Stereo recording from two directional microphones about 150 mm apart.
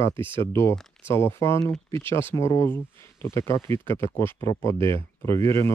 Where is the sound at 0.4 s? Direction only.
15° left (ahead or behind).